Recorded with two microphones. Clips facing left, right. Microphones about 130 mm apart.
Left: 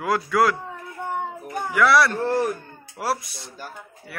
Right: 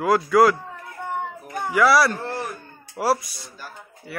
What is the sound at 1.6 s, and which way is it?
A man's voice, centre (ahead or behind).